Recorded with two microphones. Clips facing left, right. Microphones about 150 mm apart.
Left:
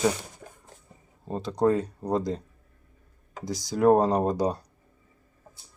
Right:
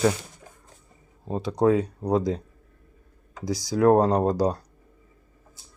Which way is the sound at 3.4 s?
5° left (ahead or behind).